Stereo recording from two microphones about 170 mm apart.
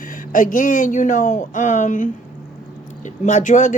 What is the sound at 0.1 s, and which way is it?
Speech, 50° left (ahead or behind).